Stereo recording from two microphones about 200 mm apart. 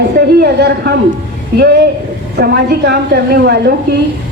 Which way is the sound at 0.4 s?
55° right (ahead or behind).